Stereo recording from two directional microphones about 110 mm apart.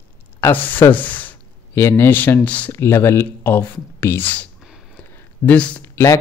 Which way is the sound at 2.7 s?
25° left (ahead or behind).